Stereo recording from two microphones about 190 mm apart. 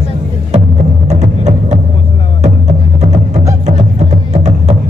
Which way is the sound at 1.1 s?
35° right (ahead or behind).